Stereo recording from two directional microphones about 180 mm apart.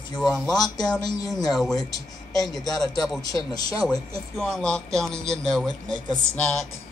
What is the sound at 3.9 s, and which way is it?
Speech, 5° left (ahead or behind).